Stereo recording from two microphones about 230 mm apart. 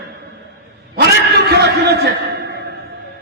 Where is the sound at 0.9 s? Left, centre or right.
Right.